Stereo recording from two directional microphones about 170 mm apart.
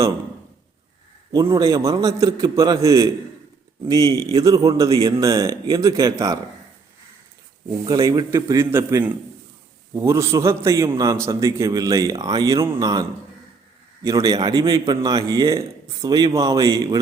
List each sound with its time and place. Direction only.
1.3 s a man's voice: 20° right (ahead or behind)
7.9 s a man's voice: 20° right (ahead or behind)